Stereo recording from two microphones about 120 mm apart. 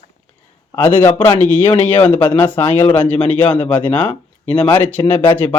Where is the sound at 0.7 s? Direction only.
20° left (ahead or behind).